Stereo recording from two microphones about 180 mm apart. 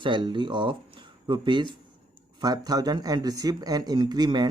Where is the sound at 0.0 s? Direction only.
25° right (ahead or behind).